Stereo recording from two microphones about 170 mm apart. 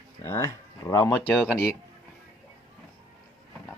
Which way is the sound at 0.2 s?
15° left (ahead or behind).